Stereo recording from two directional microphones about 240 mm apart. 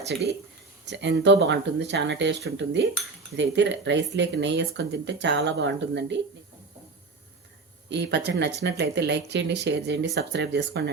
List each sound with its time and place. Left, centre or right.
0.9 s speech: right
7.9 s speech: right